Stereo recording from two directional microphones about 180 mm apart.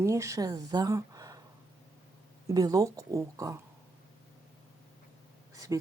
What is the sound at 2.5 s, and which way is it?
Speech, 20° right (ahead or behind).